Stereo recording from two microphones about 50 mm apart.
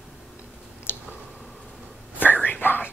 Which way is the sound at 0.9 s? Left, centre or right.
Left.